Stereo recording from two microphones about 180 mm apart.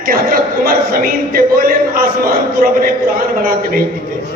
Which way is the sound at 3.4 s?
55° right (ahead or behind).